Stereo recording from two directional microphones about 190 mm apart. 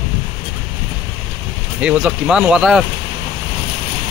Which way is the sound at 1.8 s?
5° right (ahead or behind).